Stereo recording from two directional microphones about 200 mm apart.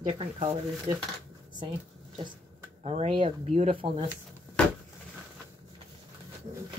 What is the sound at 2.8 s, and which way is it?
Speech, 35° right (ahead or behind).